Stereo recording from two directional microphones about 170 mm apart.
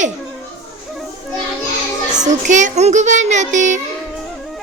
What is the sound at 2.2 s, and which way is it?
Speech, 45° right (ahead or behind).